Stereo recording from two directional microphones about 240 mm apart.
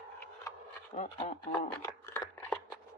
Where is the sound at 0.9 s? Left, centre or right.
Left.